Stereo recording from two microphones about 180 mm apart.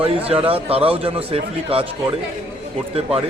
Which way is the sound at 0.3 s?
30° right (ahead or behind).